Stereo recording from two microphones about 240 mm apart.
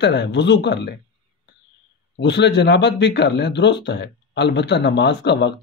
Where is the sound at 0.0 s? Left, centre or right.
Left.